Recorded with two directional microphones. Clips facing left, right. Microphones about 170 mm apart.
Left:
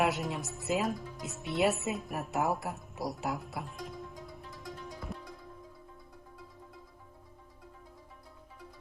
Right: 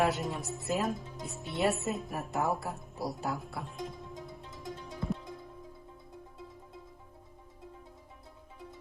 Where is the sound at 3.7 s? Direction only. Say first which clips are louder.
Right 2 dB; 20° right (ahead or behind).